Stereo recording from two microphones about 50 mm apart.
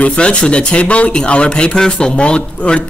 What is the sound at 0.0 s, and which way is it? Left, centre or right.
Speech, left.